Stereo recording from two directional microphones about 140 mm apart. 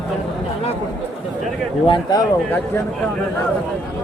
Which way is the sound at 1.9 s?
30° left (ahead or behind).